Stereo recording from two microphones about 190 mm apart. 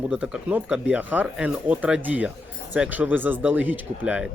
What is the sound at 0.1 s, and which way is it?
A man's voice, 5° right (ahead or behind).